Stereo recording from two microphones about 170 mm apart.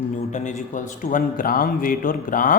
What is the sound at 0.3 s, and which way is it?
A man's voice, 45° left (ahead or behind).